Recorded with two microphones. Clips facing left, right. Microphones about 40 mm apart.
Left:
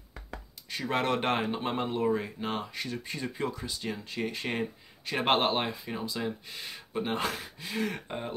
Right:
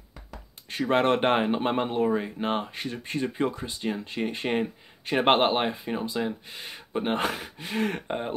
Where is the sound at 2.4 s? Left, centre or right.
Right.